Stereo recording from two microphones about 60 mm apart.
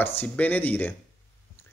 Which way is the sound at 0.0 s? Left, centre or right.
Left.